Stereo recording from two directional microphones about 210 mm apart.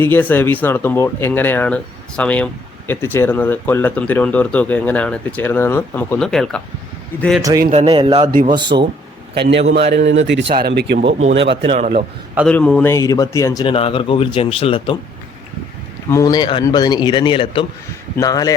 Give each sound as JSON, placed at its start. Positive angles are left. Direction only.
{"t": 0.0, "sound": "speech", "side_deg": 10}
{"t": 7.7, "sound": "speech", "side_deg": -30}
{"t": 8.3, "sound": "a man's voice", "side_deg": -40}
{"t": 8.5, "sound": "speech", "side_deg": -20}
{"t": 9.3, "sound": "speech", "side_deg": -55}
{"t": 11.7, "sound": "a man's voice", "side_deg": -30}
{"t": 12.5, "sound": "speech", "side_deg": 5}
{"t": 16.0, "sound": "a man's voice", "side_deg": 15}